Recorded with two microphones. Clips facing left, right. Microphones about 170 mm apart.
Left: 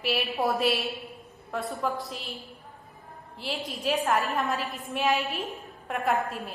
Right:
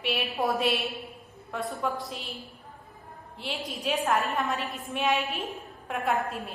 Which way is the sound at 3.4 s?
Centre (ahead or behind).